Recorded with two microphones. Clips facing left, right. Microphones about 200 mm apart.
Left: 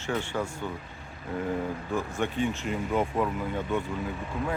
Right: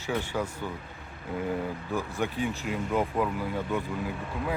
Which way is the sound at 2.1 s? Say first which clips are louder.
Left 2 dB; centre (ahead or behind).